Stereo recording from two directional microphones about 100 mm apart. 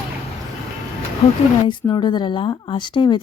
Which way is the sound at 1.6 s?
50° left (ahead or behind).